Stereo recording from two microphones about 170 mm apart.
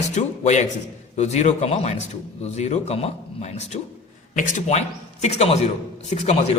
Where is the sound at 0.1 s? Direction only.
45° left (ahead or behind).